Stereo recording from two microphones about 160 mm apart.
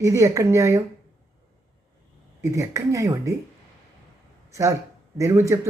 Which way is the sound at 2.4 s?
20° right (ahead or behind).